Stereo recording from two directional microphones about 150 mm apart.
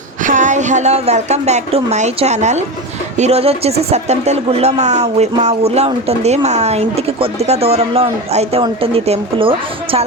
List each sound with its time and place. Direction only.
0.2 s a woman's voice: 60° right (ahead or behind); by 10.0 s 40° right (ahead or behind)